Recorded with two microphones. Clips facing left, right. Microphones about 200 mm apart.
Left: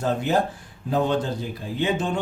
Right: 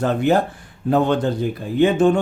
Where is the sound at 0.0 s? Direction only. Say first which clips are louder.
Right 5 dB; 65° right (ahead or behind).